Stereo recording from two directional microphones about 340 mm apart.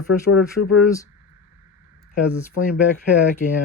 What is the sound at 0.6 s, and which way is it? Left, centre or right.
Speech, left.